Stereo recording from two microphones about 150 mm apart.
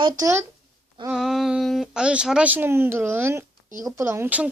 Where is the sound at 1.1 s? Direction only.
Centre (ahead or behind).